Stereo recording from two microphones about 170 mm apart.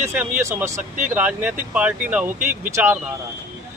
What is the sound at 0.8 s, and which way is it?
Speech, 45° right (ahead or behind).